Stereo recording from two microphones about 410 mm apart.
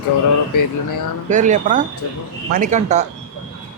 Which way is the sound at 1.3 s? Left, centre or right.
Centre.